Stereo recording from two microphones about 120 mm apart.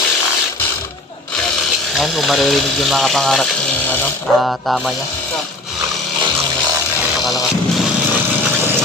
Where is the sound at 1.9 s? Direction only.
Centre (ahead or behind).